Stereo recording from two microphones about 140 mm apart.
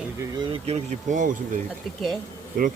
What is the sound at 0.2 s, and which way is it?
Speech, 35° right (ahead or behind).